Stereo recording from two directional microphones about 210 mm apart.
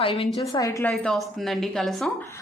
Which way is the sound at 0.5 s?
15° left (ahead or behind).